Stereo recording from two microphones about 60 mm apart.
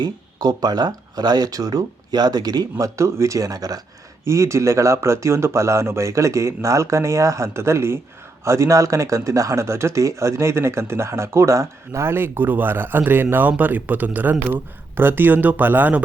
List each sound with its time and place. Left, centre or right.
0.3 s speech: right
4.3 s speech: right